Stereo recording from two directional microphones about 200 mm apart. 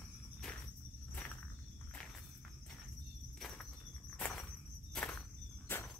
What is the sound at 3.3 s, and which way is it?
Squeal, centre (ahead or behind).